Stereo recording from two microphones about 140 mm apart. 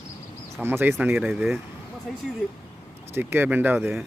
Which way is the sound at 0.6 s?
15° right (ahead or behind).